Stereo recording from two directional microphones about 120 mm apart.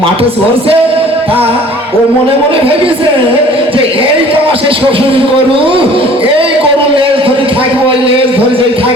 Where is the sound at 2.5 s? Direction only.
50° right (ahead or behind).